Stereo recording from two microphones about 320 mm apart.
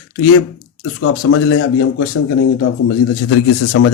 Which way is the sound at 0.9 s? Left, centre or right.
Left.